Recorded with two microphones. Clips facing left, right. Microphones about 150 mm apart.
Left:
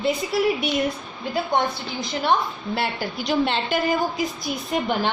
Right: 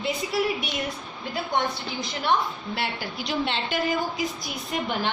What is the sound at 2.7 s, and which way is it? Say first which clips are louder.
A woman's voice: left 6 dB; 40° left (ahead or behind).